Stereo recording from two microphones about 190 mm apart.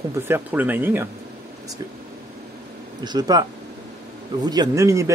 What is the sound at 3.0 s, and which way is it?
A man's voice, 20° right (ahead or behind).